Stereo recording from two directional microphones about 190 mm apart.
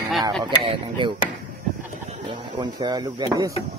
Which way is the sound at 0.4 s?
25° right (ahead or behind).